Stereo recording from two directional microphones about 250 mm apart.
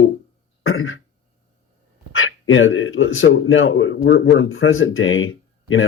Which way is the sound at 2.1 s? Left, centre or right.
Left.